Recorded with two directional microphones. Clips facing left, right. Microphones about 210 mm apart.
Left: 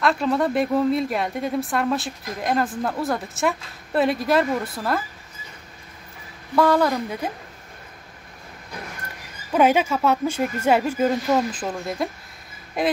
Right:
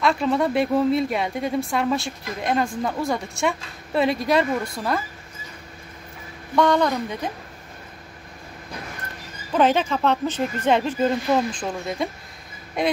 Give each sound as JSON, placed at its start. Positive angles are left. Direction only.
{"t": 0.0, "sound": "a woman's voice", "side_deg": 0}
{"t": 6.5, "sound": "a woman's voice", "side_deg": 5}
{"t": 9.5, "sound": "a woman's voice", "side_deg": 10}